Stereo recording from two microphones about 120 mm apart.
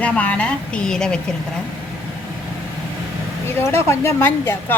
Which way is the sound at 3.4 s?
20° left (ahead or behind).